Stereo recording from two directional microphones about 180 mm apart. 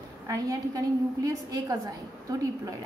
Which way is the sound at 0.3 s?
20° right (ahead or behind).